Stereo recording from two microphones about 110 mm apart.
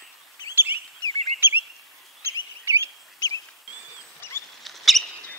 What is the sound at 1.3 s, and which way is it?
Bird vocalization, 20° right (ahead or behind).